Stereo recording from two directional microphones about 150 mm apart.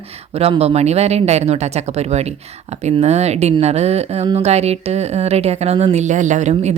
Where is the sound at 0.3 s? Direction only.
40° right (ahead or behind).